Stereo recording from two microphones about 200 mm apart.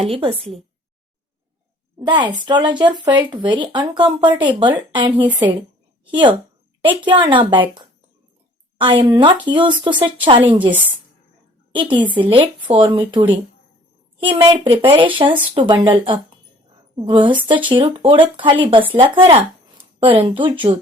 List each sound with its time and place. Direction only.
0.0 s speech: 30° right (ahead or behind)
2.0 s speech: 20° right (ahead or behind)
6.8 s speech: 25° right (ahead or behind)
10.7 s a woman's voice: 10° right (ahead or behind)
11.7 s speech: 25° right (ahead or behind)